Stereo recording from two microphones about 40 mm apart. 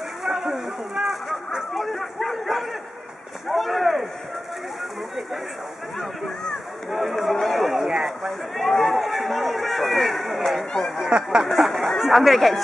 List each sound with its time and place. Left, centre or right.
0.2 s speech: centre
1.7 s speech: centre
6.9 s speech: centre
11.0 s speech: centre
11.5 s speech: centre